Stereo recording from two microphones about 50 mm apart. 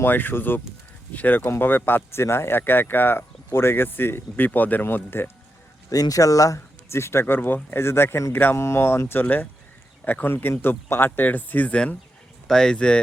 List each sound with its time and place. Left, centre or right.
0.0 s speech: left
1.5 s speech: left
2.1 s speech: left
6.1 s speech: left
8.3 s speech: left
8.5 s speech: left
9.2 s speech: left
10.2 s speech: left
11.3 s speech: left
12.5 s speech: centre